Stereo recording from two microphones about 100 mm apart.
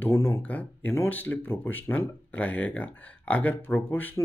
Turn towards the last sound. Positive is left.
turn(degrees=20)  # may be behind; listen again after turning